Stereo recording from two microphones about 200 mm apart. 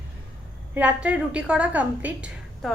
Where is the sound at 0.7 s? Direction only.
5° right (ahead or behind).